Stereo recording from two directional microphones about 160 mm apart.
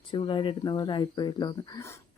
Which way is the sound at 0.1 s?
30° left (ahead or behind).